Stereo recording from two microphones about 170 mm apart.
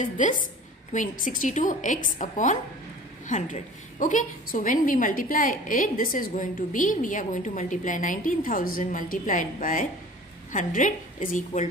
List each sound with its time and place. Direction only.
0.0 s a woman's voice: 50° left (ahead or behind)